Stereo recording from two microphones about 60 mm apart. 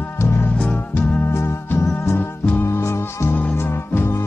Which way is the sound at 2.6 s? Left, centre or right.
Left.